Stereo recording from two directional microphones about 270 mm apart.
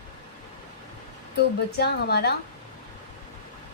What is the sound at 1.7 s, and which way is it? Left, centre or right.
Speech, left.